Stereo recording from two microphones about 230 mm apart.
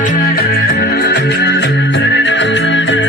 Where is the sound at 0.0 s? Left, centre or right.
Left.